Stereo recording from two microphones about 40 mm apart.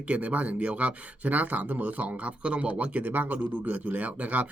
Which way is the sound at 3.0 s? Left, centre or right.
Right.